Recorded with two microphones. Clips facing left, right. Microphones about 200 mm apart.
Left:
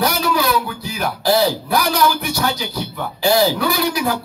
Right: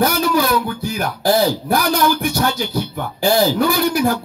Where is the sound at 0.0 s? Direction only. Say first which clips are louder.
Right 2 dB; 50° right (ahead or behind).